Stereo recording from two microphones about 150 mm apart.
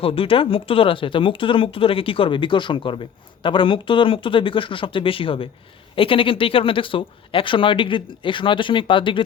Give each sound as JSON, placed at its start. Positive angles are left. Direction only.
{"t": 0.0, "sound": "speech", "side_deg": 35}